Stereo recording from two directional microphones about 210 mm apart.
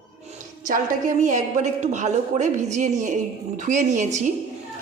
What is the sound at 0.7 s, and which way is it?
A woman's voice, 40° right (ahead or behind).